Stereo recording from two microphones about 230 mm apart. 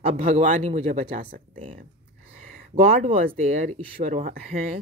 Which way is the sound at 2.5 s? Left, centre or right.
Right.